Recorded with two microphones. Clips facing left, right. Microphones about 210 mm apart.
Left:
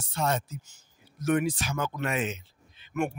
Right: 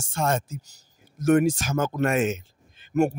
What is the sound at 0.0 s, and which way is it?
Speech, 45° right (ahead or behind).